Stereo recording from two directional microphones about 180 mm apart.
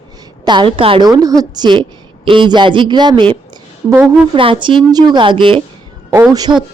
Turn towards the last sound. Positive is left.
turn(degrees=-20)  # may be behind; listen again after turning